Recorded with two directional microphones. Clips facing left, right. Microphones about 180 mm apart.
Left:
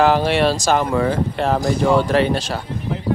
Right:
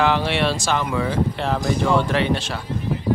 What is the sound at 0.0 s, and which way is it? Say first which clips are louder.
A man's voice: left 4 dB; 40° left (ahead or behind).